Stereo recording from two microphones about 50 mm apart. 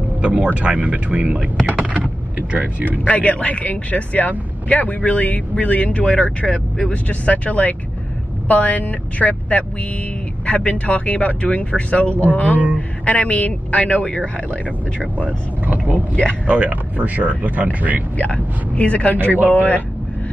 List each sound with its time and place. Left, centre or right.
0.2 s speech: right
3.1 s speech: left
15.6 s speech: right
18.1 s speech: left